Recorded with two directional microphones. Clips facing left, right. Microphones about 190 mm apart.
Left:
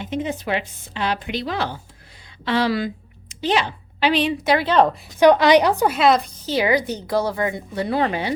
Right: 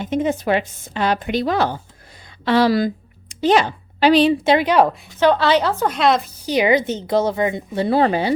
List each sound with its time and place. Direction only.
0.0 s a woman's voice: 45° right (ahead or behind)
4.5 s speech: 15° right (ahead or behind)
5.2 s a woman's voice: 15° left (ahead or behind); by 8.3 s 35° right (ahead or behind)